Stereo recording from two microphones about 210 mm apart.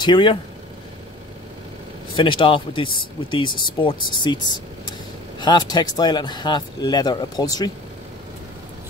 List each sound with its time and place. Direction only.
0.0 s speech: 20° left (ahead or behind)
2.1 s speech: 25° left (ahead or behind)
5.4 s speech: 20° left (ahead or behind)